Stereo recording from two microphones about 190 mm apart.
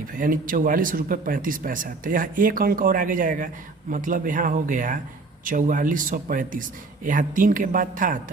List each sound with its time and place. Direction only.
0.1 s speech: 45° right (ahead or behind)